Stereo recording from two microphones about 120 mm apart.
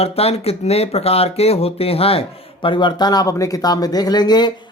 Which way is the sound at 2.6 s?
40° left (ahead or behind).